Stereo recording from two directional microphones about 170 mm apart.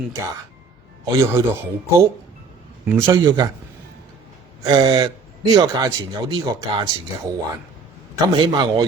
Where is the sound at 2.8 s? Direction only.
15° right (ahead or behind).